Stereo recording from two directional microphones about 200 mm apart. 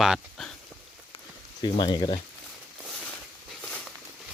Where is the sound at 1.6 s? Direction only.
25° left (ahead or behind).